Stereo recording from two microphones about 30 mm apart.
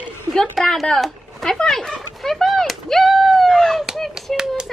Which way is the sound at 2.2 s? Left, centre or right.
Centre.